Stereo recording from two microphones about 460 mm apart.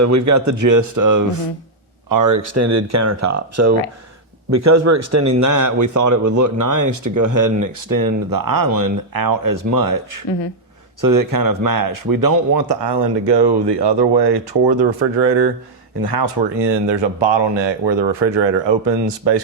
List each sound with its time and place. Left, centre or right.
0.0 s speech: right
16.0 s speech: right